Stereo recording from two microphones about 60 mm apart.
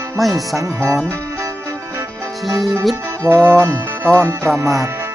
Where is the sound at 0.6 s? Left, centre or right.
Right.